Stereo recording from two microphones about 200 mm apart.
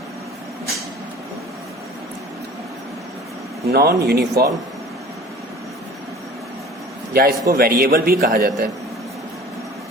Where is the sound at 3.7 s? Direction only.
50° right (ahead or behind).